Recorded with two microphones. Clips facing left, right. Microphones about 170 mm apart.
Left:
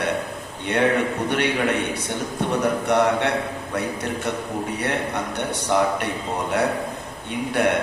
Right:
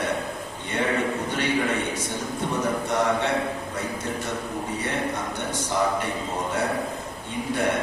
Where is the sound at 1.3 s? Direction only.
65° left (ahead or behind).